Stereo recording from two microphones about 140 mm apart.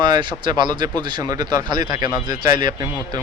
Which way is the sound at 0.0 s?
35° right (ahead or behind).